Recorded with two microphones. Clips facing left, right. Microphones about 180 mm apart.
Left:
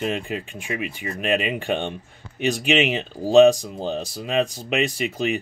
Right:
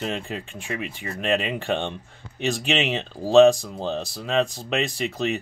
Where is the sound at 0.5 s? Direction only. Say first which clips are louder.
Left 2 dB; 15° left (ahead or behind).